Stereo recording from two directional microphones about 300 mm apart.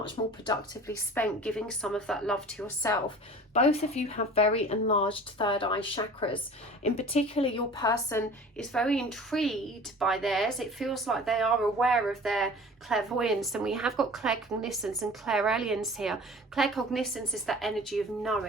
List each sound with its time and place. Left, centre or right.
0.0 s a woman's voice: centre
3.5 s speech: centre
8.5 s a woman's voice: centre